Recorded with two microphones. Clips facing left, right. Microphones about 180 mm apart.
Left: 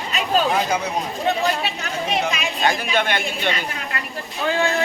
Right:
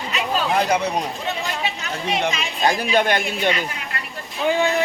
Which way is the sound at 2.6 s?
40° right (ahead or behind).